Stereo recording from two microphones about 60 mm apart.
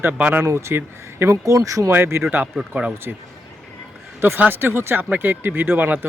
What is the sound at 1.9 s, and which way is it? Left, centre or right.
Speech, right.